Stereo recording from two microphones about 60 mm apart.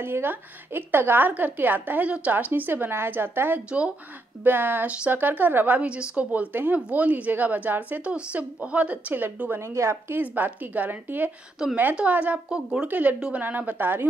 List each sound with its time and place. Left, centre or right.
0.0 s a woman's voice: right
5.8 s speech: centre
6.5 s a woman's voice: right
9.1 s a woman's voice: right
9.6 s a woman's voice: right
10.2 s a woman's voice: right
12.4 s speech: centre
12.8 s a woman's voice: right